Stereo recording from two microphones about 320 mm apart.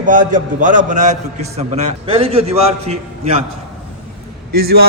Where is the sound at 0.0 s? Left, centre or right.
Right.